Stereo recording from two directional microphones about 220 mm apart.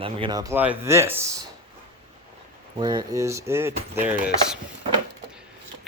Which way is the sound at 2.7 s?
20° right (ahead or behind).